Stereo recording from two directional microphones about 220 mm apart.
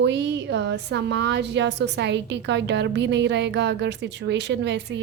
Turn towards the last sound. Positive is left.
turn(degrees=-50)  # may be behind; listen again after turning